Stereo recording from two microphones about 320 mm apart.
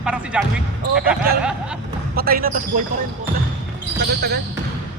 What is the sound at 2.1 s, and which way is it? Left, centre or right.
Speech, right.